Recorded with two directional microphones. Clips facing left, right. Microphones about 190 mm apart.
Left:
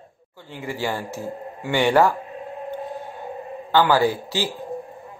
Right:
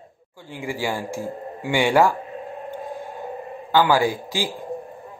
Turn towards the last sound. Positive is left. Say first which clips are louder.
# left 1 dB
turn(degrees=-10)  # may be behind; listen again after turning